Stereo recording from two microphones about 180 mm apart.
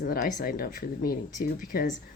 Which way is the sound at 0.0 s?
50° left (ahead or behind).